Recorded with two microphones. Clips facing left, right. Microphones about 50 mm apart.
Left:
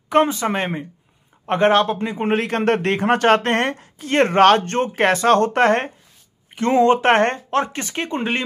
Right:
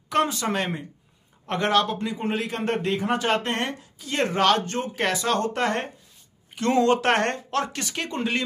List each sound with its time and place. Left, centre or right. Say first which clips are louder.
0.1 s speech: left 6 dB; left
6.5 s speech: left 5 dB; left